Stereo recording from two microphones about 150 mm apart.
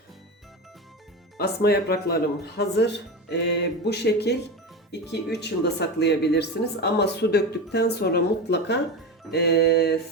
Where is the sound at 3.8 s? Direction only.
90° left.